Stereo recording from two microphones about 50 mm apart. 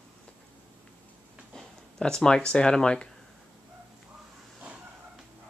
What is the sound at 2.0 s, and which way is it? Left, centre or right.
Speech, centre.